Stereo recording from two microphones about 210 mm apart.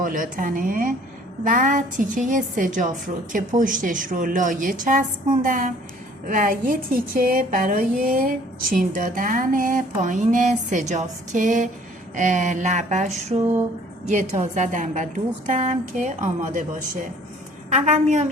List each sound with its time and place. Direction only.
0.0 s a woman's voice: 40° right (ahead or behind)